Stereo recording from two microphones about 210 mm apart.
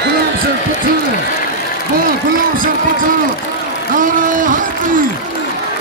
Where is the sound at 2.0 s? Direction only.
40° right (ahead or behind).